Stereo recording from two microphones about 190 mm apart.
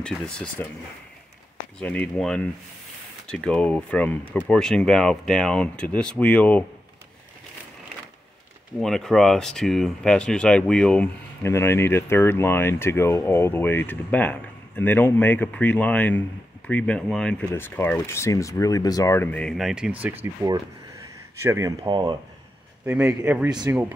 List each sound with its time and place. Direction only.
0.0 s speech: 5° left (ahead or behind)
1.8 s speech: 5° left (ahead or behind)
8.8 s speech: centre (ahead or behind); by 22.1 s 20° right (ahead or behind)
22.8 s speech: 10° right (ahead or behind)